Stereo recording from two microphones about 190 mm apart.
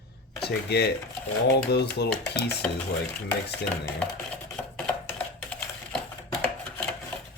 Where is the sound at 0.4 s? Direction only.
60° left (ahead or behind).